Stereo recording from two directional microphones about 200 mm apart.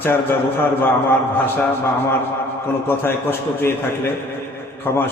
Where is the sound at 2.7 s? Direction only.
10° left (ahead or behind).